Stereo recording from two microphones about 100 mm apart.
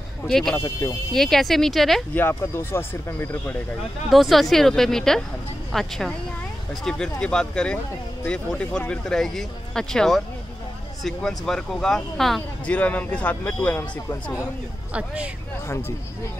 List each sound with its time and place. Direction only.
0.3 s speech: 5° left (ahead or behind)
0.6 s speech: 25° left (ahead or behind)
1.1 s speech: 5° left (ahead or behind)
2.1 s speech: 25° left (ahead or behind)
4.1 s speech: centre (ahead or behind)
12.6 s speech: 15° left (ahead or behind)
14.9 s speech: 10° right (ahead or behind)